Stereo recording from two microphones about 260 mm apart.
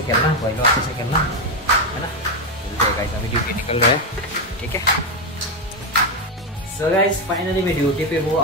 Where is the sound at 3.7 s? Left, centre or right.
Left.